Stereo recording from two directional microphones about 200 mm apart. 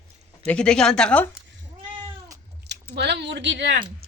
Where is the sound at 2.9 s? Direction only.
55° right (ahead or behind).